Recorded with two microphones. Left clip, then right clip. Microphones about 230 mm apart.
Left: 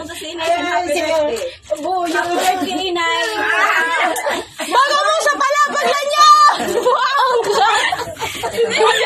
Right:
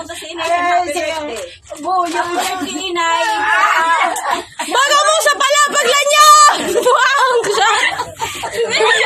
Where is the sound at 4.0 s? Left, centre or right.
Centre.